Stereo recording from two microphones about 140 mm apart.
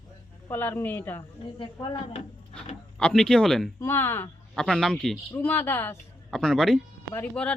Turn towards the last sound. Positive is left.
turn(degrees=5)  # may be behind; listen again after turning